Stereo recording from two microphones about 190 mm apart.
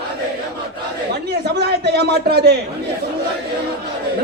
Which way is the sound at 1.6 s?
60° right (ahead or behind).